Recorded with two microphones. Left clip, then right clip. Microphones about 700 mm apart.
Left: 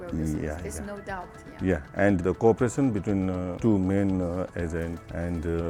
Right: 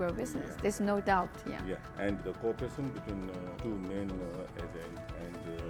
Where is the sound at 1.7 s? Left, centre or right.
Left.